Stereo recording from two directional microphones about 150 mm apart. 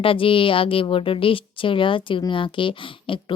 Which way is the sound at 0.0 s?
35° left (ahead or behind).